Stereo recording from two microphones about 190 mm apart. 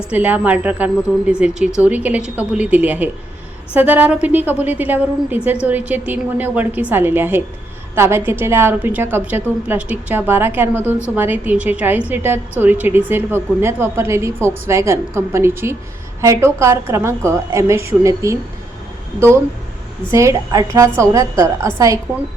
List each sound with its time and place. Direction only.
0.1 s a woman's voice: 5° right (ahead or behind)
20.1 s a woman's voice: 15° right (ahead or behind)